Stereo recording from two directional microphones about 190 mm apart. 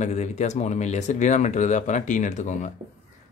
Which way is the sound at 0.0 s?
35° left (ahead or behind).